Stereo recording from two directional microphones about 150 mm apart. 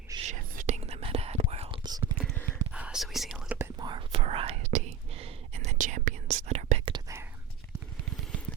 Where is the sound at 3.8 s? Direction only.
35° right (ahead or behind).